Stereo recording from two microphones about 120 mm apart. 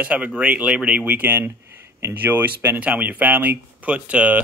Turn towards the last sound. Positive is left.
turn(degrees=-10)  # may be behind; listen again after turning